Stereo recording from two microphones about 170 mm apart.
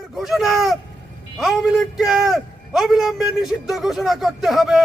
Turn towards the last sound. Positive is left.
turn(degrees=0)  # may be behind; listen again after turning